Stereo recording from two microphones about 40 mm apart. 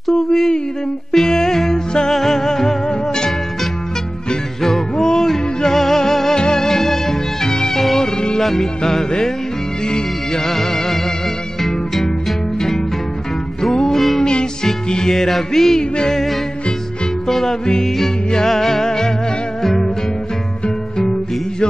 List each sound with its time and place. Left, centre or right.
0.3 s a sound: centre
1.1 s music: centre
4.3 s music: centre
10.4 s music: centre
21.0 s music: centre